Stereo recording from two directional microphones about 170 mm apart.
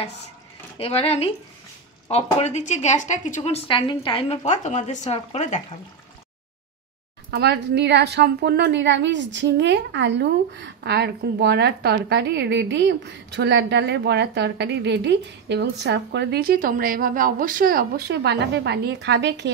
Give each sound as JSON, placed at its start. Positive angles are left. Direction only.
{"t": 0.7, "sound": "a woman's voice", "side_deg": 35}
{"t": 7.2, "sound": "a woman's voice", "side_deg": -75}